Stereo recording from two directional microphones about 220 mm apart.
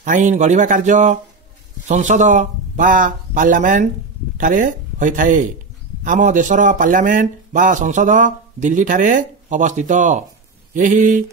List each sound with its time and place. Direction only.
0.0 s speech: 35° right (ahead or behind)